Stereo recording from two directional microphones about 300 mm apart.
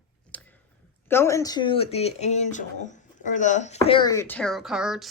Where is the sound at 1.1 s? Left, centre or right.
Centre.